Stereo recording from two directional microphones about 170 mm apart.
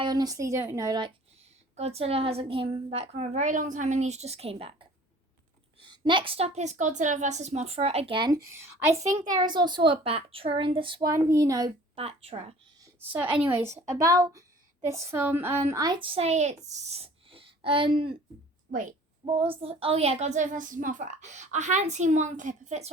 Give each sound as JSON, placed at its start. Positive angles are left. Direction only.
{"t": 0.0, "sound": "a woman's voice", "side_deg": -25}
{"t": 1.7, "sound": "a woman's voice", "side_deg": -40}
{"t": 5.9, "sound": "a woman's voice", "side_deg": -25}
{"t": 8.5, "sound": "a woman's voice", "side_deg": -15}
{"t": 9.3, "sound": "a woman's voice", "side_deg": -25}
{"t": 11.9, "sound": "a woman's voice", "side_deg": -35}
{"t": 13.4, "sound": "a woman's voice", "side_deg": -15}
{"t": 18.7, "sound": "a woman's voice", "side_deg": -50}
{"t": 19.2, "sound": "a woman's voice", "side_deg": -35}